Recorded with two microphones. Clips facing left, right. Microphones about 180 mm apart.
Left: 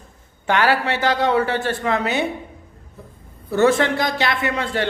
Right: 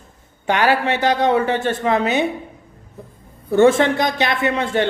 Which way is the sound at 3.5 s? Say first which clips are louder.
Right 3 dB; 25° right (ahead or behind).